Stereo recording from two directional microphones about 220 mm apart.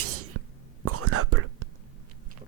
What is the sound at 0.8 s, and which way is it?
Whispering, 90° right.